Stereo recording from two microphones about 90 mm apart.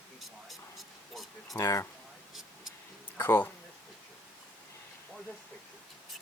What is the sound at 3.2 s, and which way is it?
Speech, 20° left (ahead or behind).